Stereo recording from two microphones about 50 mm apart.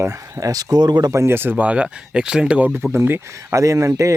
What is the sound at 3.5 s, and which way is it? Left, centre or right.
Speech, right.